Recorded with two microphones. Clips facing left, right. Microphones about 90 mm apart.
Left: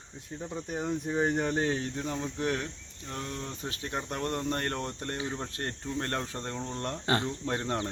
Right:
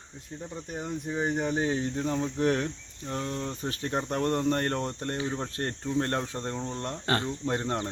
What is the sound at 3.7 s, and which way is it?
Cricket, 35° right (ahead or behind).